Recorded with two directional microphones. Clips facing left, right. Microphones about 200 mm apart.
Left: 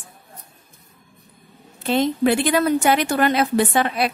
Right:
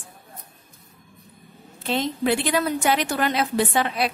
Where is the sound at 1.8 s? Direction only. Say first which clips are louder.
Left 5 dB; 50° left (ahead or behind).